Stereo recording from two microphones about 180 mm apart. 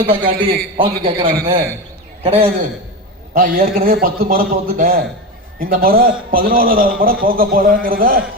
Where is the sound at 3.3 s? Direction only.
50° right (ahead or behind).